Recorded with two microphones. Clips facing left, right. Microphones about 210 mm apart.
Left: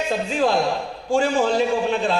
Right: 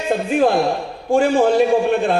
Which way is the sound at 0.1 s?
55° right (ahead or behind).